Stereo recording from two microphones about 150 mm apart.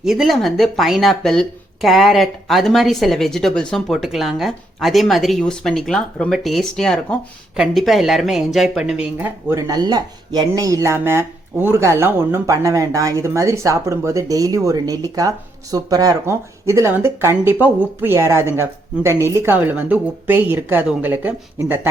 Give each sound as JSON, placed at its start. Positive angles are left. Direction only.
{"t": 0.0, "sound": "speech", "side_deg": 0}